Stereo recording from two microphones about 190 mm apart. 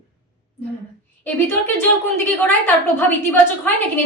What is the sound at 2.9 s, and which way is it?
Speech, 10° left (ahead or behind).